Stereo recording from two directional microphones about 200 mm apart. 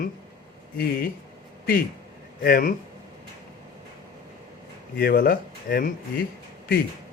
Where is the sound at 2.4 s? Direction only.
50° left (ahead or behind).